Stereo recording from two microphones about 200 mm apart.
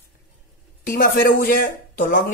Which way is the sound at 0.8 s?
45° left (ahead or behind).